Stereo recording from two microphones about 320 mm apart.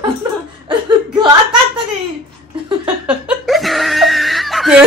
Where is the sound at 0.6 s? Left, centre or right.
Centre.